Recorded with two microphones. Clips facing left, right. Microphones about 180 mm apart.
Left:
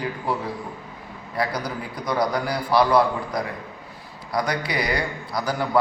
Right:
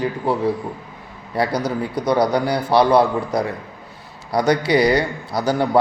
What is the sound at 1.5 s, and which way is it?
Speech, 75° right (ahead or behind).